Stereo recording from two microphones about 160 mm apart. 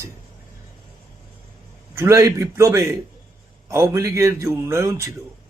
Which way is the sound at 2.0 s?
20° right (ahead or behind).